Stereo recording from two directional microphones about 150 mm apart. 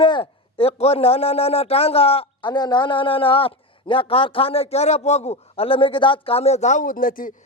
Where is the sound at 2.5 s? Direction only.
30° left (ahead or behind); by 7.3 s 65° left (ahead or behind).